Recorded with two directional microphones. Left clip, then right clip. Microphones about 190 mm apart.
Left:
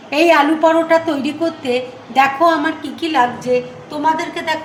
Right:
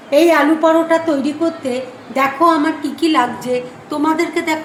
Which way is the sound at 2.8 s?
Centre (ahead or behind).